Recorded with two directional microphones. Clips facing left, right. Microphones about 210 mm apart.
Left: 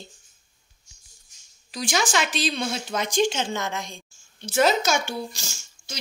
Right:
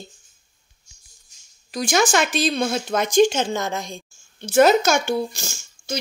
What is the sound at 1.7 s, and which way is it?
A woman's voice, 50° right (ahead or behind).